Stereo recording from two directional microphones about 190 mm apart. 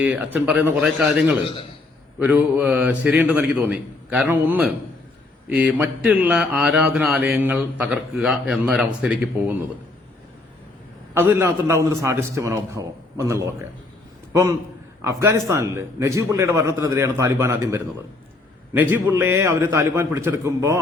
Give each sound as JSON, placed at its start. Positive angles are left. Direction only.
{"t": 0.0, "sound": "speech", "side_deg": -10}
{"t": 11.1, "sound": "speech", "side_deg": -10}
{"t": 15.2, "sound": "speech", "side_deg": -15}